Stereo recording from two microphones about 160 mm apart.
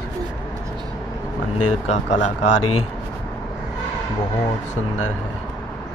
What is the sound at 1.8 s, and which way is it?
Speech, 45° left (ahead or behind).